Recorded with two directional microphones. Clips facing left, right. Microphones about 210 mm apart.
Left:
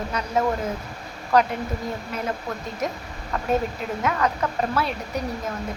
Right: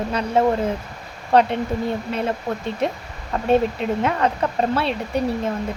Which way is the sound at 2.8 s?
30° right (ahead or behind).